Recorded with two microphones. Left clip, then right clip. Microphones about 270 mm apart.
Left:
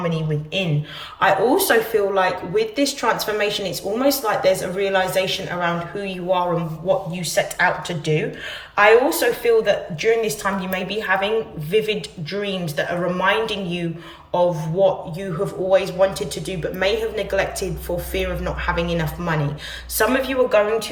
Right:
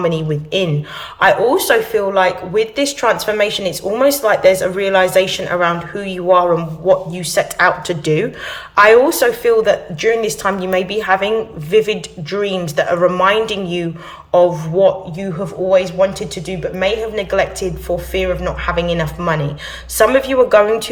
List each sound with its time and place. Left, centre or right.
0.0 s speech: centre
1.2 s speech: centre